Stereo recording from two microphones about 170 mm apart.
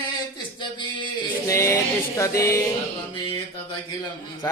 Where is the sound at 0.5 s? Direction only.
30° left (ahead or behind).